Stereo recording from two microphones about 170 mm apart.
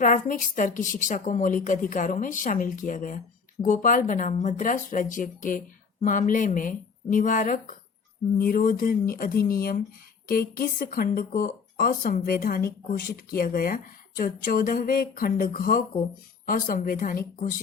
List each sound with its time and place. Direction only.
0.0 s speech: 50° left (ahead or behind)